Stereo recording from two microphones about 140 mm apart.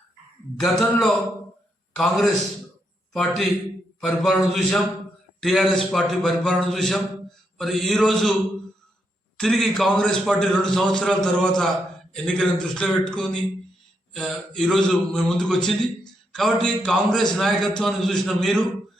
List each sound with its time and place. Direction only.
0.6 s a man's voice: centre (ahead or behind)
9.4 s a man's voice: centre (ahead or behind)